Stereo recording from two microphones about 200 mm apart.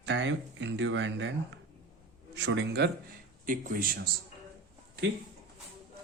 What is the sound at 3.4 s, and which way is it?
Speech, 40° right (ahead or behind).